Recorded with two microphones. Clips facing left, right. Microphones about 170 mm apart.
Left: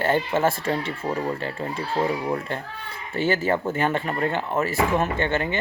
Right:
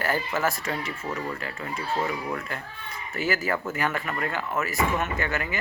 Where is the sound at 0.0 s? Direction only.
25° left (ahead or behind).